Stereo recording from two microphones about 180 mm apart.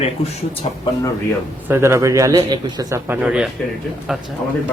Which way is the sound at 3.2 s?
5° right (ahead or behind).